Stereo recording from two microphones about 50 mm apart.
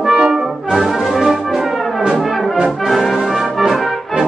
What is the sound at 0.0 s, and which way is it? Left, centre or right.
Brass instrument, centre.